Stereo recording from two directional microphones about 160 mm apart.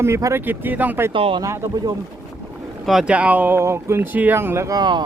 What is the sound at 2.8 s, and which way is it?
Speech, centre (ahead or behind).